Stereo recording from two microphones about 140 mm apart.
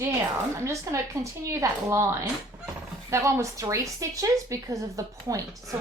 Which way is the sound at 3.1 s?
20° right (ahead or behind).